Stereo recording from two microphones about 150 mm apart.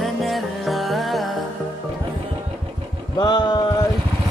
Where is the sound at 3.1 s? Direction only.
30° left (ahead or behind).